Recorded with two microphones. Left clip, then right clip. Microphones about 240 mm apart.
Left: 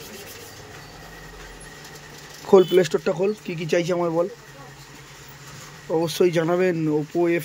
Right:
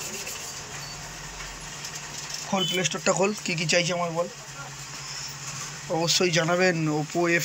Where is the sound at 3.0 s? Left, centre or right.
Centre.